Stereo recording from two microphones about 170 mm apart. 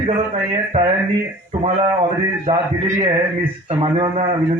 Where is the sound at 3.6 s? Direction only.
35° right (ahead or behind).